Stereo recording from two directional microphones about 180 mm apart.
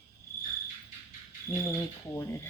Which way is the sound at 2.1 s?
15° left (ahead or behind).